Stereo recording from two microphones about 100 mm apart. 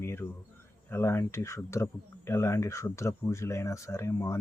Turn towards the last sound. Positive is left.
turn(degrees=30)  # may be behind; listen again after turning